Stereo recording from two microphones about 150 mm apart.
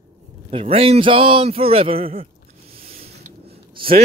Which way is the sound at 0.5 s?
40° right (ahead or behind).